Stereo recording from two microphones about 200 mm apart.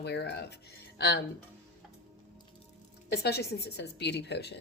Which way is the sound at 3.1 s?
55° left (ahead or behind).